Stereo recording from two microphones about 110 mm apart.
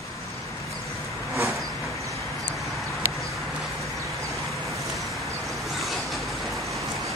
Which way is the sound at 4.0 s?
30° right (ahead or behind).